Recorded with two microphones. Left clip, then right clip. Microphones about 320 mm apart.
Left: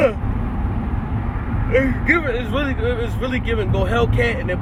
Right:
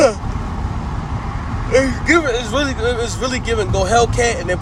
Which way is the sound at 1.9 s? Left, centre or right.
Centre.